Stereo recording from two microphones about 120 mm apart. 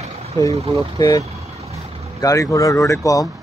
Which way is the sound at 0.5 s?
55° right (ahead or behind).